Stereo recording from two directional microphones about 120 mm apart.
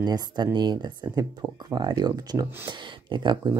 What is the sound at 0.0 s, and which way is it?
Speech, 35° right (ahead or behind).